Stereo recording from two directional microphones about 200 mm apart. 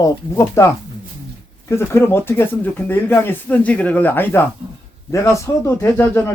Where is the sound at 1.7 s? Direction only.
10° left (ahead or behind).